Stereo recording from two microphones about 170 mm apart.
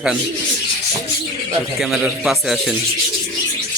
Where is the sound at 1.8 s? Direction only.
Centre (ahead or behind).